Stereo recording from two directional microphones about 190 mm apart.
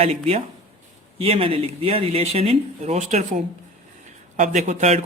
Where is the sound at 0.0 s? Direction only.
30° right (ahead or behind).